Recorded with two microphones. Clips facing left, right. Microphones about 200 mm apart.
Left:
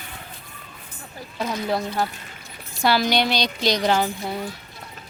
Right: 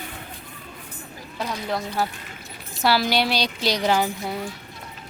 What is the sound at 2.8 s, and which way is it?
Speech, 5° right (ahead or behind).